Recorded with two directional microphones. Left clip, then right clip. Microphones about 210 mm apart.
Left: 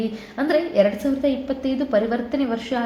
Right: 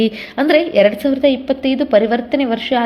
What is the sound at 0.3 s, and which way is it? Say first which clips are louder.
A woman's voice: right 6 dB; 30° right (ahead or behind).